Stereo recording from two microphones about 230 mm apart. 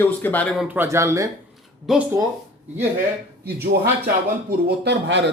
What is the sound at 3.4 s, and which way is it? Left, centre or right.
Speech, right.